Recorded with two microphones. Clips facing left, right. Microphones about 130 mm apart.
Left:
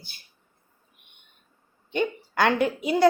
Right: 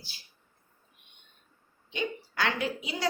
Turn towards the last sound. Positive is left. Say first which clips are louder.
# left 9 dB
turn(degrees=55)  # may be behind; listen again after turning